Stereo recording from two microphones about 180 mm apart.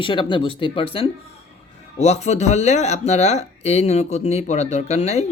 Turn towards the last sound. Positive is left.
turn(degrees=35)  # may be behind; listen again after turning